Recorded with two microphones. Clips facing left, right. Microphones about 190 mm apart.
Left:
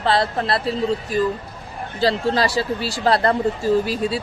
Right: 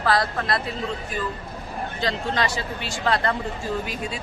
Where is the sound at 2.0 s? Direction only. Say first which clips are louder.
Left 7 dB; 35° left (ahead or behind).